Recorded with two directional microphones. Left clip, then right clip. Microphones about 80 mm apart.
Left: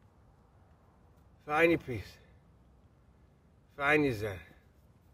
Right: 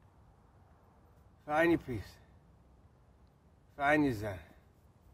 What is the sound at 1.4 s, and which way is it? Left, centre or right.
Speech, right.